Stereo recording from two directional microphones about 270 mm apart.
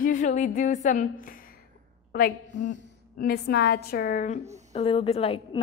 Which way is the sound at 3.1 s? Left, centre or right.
Left.